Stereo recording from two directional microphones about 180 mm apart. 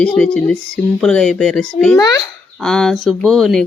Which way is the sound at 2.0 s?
20° left (ahead or behind).